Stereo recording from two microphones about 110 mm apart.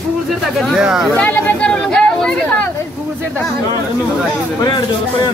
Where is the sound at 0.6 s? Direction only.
Centre (ahead or behind).